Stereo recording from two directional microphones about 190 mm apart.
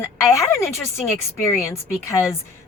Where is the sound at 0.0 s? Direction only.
15° left (ahead or behind).